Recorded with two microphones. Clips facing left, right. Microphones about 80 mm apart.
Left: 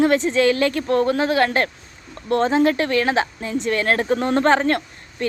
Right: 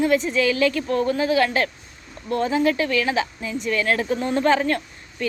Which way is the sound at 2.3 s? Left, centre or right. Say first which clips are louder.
Left 4 dB; left.